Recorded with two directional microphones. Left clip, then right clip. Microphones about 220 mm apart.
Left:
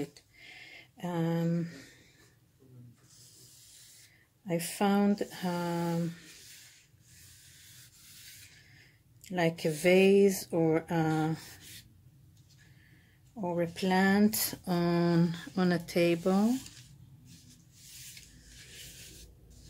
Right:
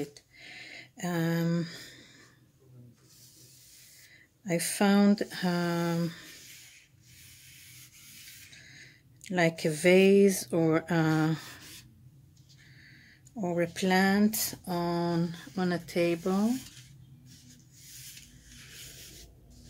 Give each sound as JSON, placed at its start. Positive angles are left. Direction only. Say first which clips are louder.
{"t": 0.0, "sound": "a sound", "louder": "right 2 dB", "side_deg": -5}
{"t": 4.5, "sound": "speech", "louder": "right 3 dB", "side_deg": -15}
{"t": 8.6, "sound": "speech", "louder": "right 8 dB", "side_deg": -15}
{"t": 13.3, "sound": "speech", "louder": "right 2 dB", "side_deg": -15}